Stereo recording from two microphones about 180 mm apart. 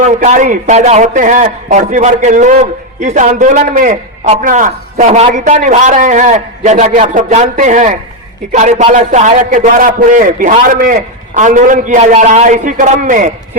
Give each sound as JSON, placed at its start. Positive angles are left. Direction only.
{"t": 0.0, "sound": "a man's voice", "side_deg": -45}